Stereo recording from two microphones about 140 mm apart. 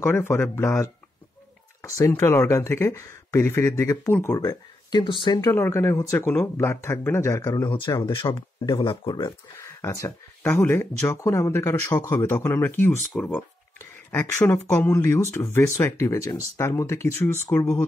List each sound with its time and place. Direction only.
0.0 s speech: 15° left (ahead or behind); by 5.5 s 35° left (ahead or behind)
5.5 s speech: 20° left (ahead or behind)
8.0 s speech: 35° left (ahead or behind)
9.6 s speech: 20° left (ahead or behind)